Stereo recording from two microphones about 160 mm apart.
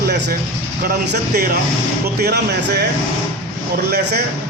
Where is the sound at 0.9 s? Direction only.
75° right (ahead or behind).